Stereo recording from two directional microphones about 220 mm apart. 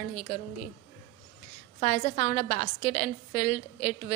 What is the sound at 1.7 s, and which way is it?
A woman's voice, 35° left (ahead or behind).